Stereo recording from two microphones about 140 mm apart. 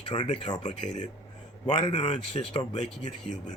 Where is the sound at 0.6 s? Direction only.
60° left (ahead or behind).